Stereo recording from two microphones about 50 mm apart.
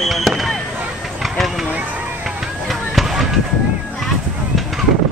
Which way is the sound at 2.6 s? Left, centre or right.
Centre.